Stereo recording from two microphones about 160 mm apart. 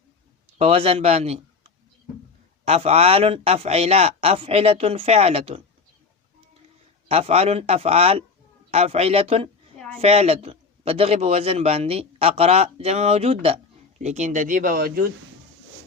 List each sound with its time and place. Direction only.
0.6 s a man's voice: 40° right (ahead or behind)
2.6 s a man's voice: 40° right (ahead or behind)
7.1 s a man's voice: 40° right (ahead or behind); by 15.0 s 65° right (ahead or behind)